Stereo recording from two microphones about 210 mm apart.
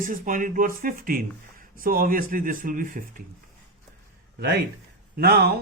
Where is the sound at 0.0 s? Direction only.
40° right (ahead or behind).